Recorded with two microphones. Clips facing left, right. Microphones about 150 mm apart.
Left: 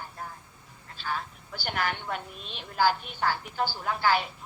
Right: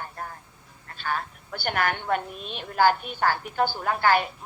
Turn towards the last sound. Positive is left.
turn(degrees=-55)  # may be behind; listen again after turning